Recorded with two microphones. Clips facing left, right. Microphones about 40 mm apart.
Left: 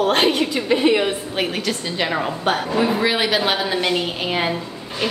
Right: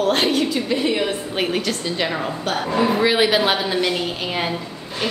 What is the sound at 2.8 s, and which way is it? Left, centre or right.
A woman's voice, centre.